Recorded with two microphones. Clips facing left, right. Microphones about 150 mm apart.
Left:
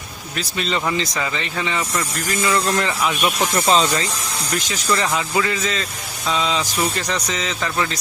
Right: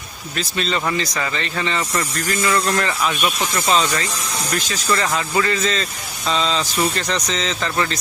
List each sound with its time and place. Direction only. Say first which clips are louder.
0.3 s speech: right 1 dB; 15° left (ahead or behind)
3.5 s speech: left 2 dB; 30° left (ahead or behind)
4.9 s speech: even; 15° left (ahead or behind)